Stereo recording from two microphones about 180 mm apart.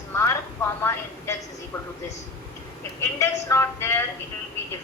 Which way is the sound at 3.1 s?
15° left (ahead or behind).